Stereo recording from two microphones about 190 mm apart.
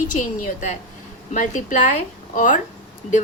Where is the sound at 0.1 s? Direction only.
40° left (ahead or behind).